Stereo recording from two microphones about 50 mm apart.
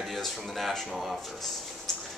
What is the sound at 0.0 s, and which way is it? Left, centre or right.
Speech, centre.